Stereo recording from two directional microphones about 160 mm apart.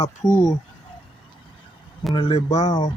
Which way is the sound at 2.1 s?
35° left (ahead or behind).